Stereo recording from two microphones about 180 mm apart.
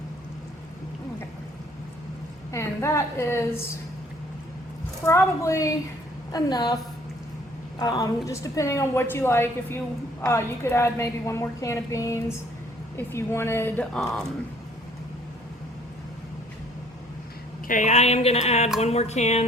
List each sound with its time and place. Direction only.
2.5 s a woman's voice: 15° left (ahead or behind)
5.0 s a woman's voice: 15° left (ahead or behind)
7.8 s a woman's voice: 20° left (ahead or behind); by 14.3 s centre (ahead or behind)
17.7 s speech: 45° left (ahead or behind)